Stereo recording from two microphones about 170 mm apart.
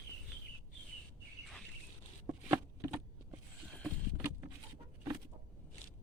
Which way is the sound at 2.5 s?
15° right (ahead or behind).